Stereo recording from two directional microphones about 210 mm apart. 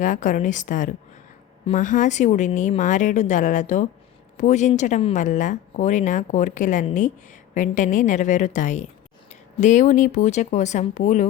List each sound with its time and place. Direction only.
0.0 s speech: 35° left (ahead or behind)